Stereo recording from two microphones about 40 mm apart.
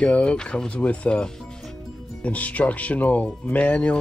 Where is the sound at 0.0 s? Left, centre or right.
Left.